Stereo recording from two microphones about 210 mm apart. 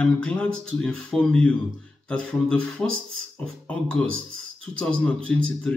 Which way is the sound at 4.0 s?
70° right (ahead or behind).